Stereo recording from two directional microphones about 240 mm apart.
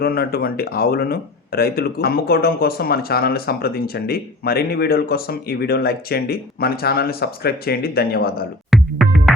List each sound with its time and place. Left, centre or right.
0.0 s speech: left
8.7 s music: centre